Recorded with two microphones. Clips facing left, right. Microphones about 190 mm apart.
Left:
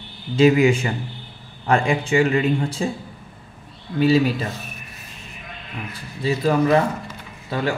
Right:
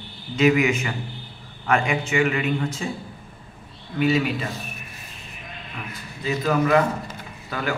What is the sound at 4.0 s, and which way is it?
Speech, 35° left (ahead or behind).